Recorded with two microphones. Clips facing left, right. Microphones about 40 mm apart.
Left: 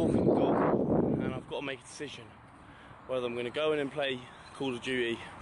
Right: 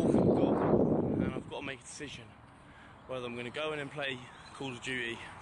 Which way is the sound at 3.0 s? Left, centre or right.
Centre.